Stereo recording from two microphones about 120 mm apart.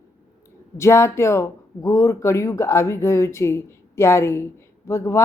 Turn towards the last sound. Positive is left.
turn(degrees=25)  # may be behind; listen again after turning